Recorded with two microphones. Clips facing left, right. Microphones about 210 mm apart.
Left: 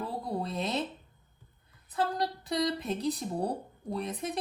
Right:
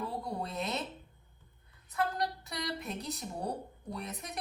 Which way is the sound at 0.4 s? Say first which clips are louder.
Left 4 dB; 30° left (ahead or behind).